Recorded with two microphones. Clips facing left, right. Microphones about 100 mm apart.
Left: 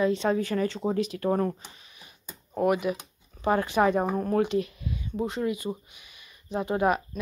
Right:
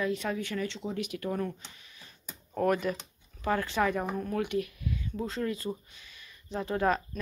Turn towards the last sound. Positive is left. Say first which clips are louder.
# left 3 dB
turn(degrees=15)  # may be behind; listen again after turning